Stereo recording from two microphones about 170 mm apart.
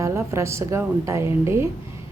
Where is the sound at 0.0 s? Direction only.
15° right (ahead or behind).